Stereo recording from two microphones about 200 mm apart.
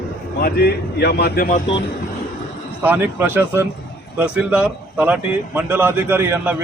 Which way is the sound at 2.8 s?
10° right (ahead or behind).